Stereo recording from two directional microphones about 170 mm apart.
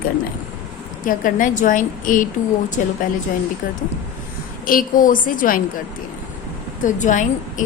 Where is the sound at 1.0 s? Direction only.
50° left (ahead or behind).